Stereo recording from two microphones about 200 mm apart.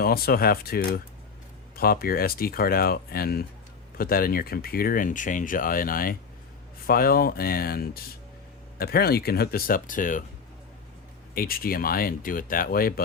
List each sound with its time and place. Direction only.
0.0 s speech: 50° left (ahead or behind)
11.3 s speech: 45° left (ahead or behind)